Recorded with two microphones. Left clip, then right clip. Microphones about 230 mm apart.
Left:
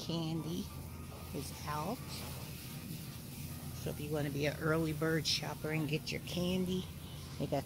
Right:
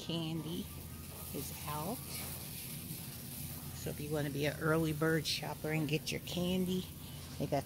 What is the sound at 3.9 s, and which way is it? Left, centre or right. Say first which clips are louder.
Speech: even; centre.